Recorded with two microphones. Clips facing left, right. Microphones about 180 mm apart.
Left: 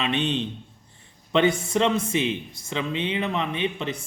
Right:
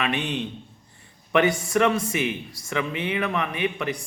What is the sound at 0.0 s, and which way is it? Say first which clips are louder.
Speech: left 1 dB; 25° left (ahead or behind).